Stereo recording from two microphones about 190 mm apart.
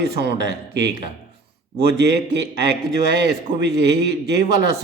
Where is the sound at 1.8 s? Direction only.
65° right (ahead or behind).